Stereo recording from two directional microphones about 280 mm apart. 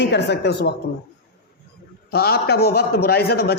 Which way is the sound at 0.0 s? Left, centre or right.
Left.